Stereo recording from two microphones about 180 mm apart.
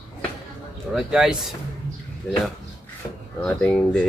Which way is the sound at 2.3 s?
5° left (ahead or behind).